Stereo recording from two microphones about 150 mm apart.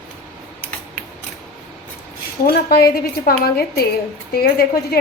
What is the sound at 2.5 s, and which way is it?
A woman's voice, 90° left.